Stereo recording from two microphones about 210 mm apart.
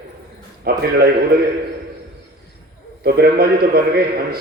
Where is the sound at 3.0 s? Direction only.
45° right (ahead or behind).